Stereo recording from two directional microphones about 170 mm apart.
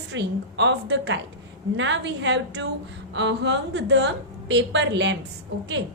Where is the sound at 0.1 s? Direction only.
90° right.